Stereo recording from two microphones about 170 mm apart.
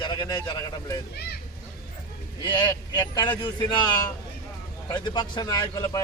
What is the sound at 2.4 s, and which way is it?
A man's voice, 25° left (ahead or behind).